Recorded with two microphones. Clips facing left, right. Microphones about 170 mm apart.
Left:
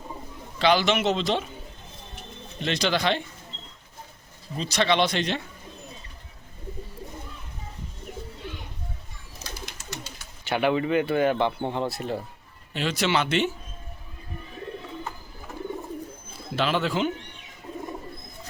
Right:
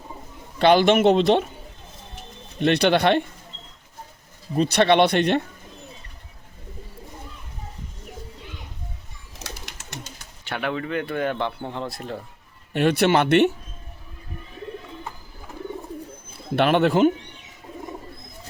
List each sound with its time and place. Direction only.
0.6 s a man's voice: 55° right (ahead or behind)
2.6 s a man's voice: 60° right (ahead or behind)
4.5 s a man's voice: 55° right (ahead or behind)
9.4 s bird: 75° right (ahead or behind)
10.4 s speech: centre (ahead or behind)
12.7 s a man's voice: 60° right (ahead or behind)
16.6 s a man's voice: 60° right (ahead or behind)